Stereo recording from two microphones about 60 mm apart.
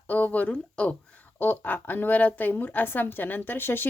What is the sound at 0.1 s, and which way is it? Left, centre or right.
Speech, left.